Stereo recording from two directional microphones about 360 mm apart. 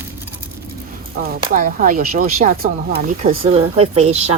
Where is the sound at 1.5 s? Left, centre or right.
Right.